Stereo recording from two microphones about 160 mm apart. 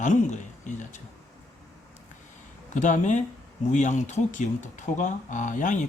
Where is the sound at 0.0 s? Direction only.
50° left (ahead or behind).